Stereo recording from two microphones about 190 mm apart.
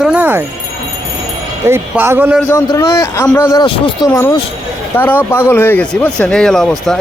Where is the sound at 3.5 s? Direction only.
25° left (ahead or behind).